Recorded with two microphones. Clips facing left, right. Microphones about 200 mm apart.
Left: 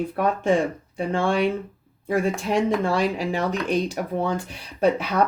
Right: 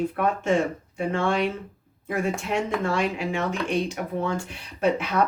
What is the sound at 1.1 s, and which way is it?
Speech, 30° left (ahead or behind).